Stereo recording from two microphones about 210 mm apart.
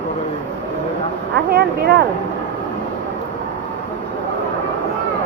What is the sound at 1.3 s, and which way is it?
Speech, 50° right (ahead or behind).